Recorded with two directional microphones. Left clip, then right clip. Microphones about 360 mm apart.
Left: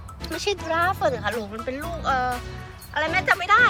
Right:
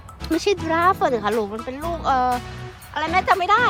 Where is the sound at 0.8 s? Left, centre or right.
Centre.